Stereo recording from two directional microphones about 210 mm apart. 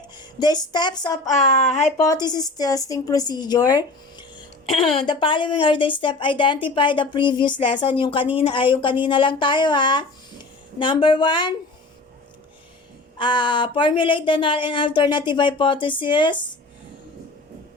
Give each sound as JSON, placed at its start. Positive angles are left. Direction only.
{"t": 0.2, "sound": "speech", "side_deg": 20}
{"t": 1.3, "sound": "speech", "side_deg": 35}
{"t": 2.0, "sound": "a woman's voice", "side_deg": 20}
{"t": 13.1, "sound": "speech", "side_deg": 20}